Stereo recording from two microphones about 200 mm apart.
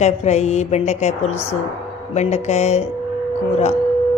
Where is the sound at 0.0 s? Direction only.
35° left (ahead or behind).